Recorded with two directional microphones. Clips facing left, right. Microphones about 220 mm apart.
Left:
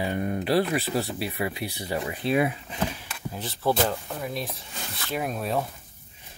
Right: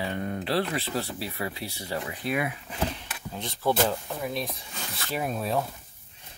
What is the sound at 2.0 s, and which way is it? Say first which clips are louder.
Speech: left 6 dB; 30° left (ahead or behind).